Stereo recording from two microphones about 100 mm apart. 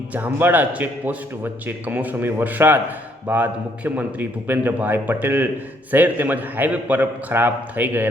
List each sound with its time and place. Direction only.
0.1 s a man's voice: 15° right (ahead or behind)